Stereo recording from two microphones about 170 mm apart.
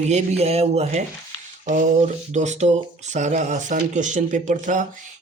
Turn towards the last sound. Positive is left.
turn(degrees=-50)  # may be behind; listen again after turning